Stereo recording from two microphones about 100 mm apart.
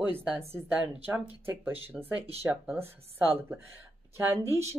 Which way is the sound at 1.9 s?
Centre (ahead or behind).